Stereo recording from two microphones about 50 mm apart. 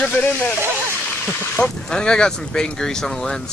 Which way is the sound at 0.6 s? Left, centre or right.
Right.